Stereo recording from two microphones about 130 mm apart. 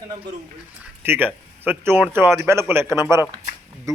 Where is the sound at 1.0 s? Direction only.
15° right (ahead or behind).